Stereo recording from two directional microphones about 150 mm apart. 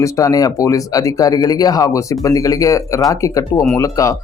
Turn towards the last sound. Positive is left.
turn(degrees=20)  # may be behind; listen again after turning